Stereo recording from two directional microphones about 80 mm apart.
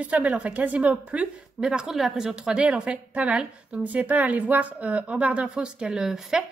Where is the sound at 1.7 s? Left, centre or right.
Centre.